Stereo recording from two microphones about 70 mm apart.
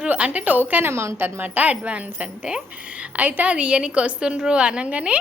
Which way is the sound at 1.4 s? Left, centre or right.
Right.